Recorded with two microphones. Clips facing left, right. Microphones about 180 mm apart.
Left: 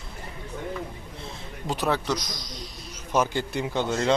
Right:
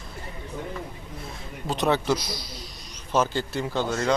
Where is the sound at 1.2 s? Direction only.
15° left (ahead or behind).